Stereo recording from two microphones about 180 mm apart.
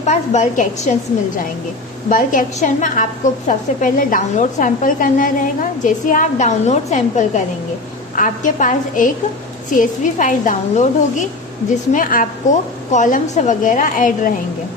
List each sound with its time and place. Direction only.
0.0 s a woman's voice: 40° left (ahead or behind)
2.0 s a woman's voice: 45° left (ahead or behind)
11.9 s a woman's voice: 50° left (ahead or behind)